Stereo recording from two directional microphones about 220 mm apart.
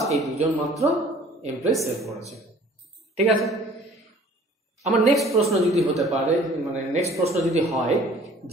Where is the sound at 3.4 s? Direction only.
Centre (ahead or behind).